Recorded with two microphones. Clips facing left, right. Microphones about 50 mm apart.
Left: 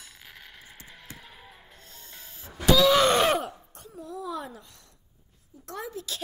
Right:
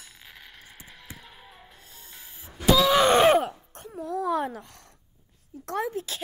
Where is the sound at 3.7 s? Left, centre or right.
Right.